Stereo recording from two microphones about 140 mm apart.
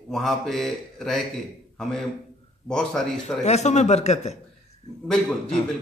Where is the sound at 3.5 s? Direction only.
55° left (ahead or behind).